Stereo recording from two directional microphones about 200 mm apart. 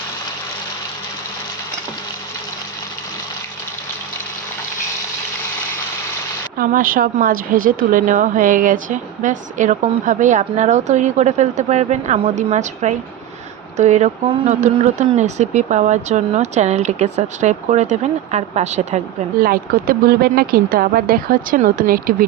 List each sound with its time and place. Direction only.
6.6 s speech: 45° right (ahead or behind)
19.5 s speech: 50° right (ahead or behind)